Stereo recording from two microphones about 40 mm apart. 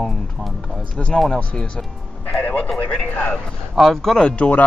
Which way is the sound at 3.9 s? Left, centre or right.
Centre.